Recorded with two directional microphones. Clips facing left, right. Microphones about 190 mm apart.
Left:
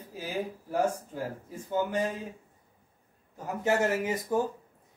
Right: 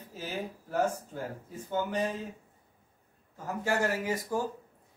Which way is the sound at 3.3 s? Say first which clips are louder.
Left 3 dB; 20° left (ahead or behind).